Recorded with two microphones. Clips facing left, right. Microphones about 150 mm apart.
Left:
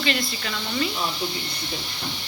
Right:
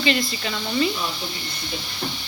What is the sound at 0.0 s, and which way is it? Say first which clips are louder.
Speech: right 3 dB; centre (ahead or behind).